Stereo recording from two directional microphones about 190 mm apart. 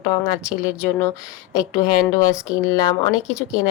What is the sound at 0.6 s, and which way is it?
Speech, 15° left (ahead or behind).